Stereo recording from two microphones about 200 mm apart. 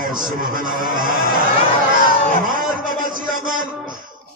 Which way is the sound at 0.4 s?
45° right (ahead or behind).